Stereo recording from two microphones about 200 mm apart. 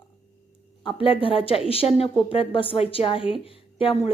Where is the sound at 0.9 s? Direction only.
25° left (ahead or behind).